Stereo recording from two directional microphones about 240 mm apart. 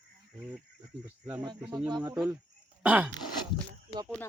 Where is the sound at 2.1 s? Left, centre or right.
Centre.